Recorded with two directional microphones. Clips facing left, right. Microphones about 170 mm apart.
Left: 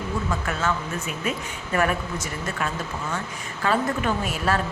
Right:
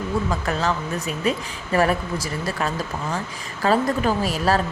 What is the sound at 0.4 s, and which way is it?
A woman's voice, 35° right (ahead or behind).